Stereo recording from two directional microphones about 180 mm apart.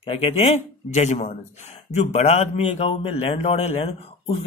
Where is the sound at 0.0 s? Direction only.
30° left (ahead or behind).